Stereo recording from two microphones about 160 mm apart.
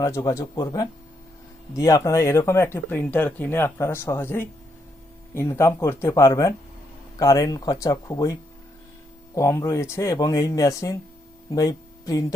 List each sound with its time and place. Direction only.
0.0 s speech: 20° left (ahead or behind)